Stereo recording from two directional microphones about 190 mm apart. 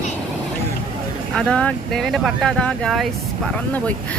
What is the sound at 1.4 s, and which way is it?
Speech, 5° left (ahead or behind).